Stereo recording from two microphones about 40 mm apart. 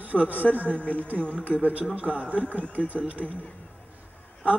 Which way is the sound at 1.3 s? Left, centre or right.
Right.